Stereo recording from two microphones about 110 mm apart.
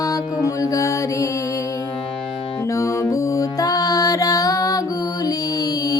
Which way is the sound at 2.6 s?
30° left (ahead or behind).